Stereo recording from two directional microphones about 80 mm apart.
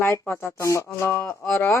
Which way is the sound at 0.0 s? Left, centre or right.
Left.